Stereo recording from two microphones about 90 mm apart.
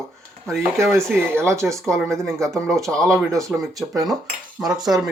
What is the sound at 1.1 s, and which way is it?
Speech, 30° right (ahead or behind).